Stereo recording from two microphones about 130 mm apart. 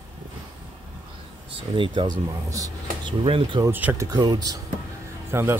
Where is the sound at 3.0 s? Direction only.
40° right (ahead or behind).